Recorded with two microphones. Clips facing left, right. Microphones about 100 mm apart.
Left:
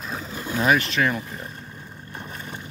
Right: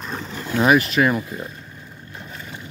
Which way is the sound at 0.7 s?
10° right (ahead or behind).